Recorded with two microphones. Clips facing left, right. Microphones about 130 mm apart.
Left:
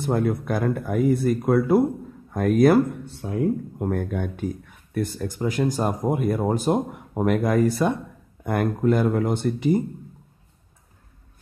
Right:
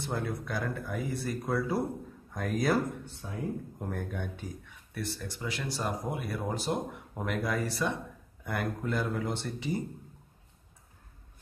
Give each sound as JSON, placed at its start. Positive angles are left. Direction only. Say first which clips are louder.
{"t": 0.0, "sound": "speech", "louder": "left 11 dB", "side_deg": 50}